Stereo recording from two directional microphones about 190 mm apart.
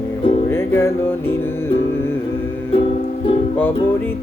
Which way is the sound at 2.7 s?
30° left (ahead or behind).